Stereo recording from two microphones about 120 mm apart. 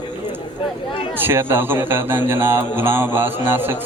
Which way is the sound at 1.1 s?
20° right (ahead or behind).